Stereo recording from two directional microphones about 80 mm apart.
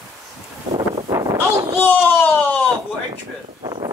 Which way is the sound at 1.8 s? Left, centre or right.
Left.